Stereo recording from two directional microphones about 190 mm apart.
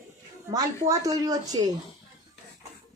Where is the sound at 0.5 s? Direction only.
20° right (ahead or behind).